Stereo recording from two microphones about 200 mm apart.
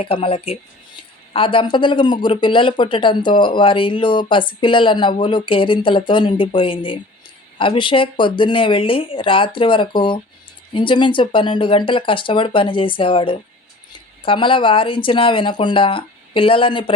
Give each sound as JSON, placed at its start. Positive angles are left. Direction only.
{"t": 0.0, "sound": "speech", "side_deg": 25}